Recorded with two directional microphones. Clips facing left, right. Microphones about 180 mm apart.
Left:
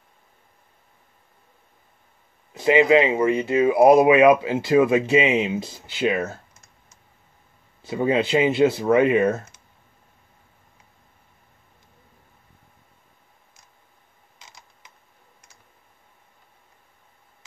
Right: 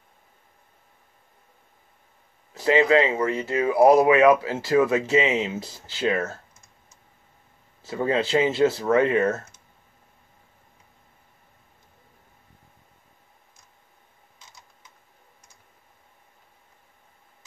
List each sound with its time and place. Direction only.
2.5 s speech: 20° left (ahead or behind)
7.8 s speech: 15° left (ahead or behind)
14.4 s a sound: 90° left